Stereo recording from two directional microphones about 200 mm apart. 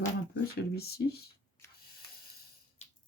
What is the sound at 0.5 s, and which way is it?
Speech, 50° left (ahead or behind).